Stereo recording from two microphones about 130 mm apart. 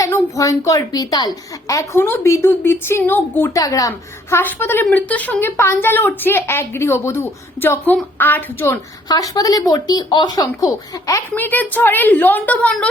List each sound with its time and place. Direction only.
0.0 s a woman's voice: 25° left (ahead or behind)
3.6 s a woman's voice: 25° left (ahead or behind)
9.0 s a woman's voice: 30° left (ahead or behind)
11.3 s a woman's voice: 15° left (ahead or behind)